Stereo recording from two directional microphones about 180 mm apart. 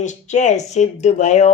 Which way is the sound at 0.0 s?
40° left (ahead or behind).